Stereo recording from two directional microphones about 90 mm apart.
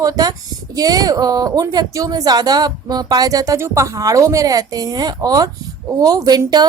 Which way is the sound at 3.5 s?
30° right (ahead or behind).